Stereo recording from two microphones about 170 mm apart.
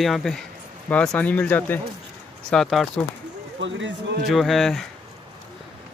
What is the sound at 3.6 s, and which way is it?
Speech, 90° right.